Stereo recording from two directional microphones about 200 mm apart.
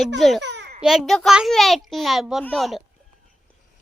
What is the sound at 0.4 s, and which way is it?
Babbling, 60° right (ahead or behind).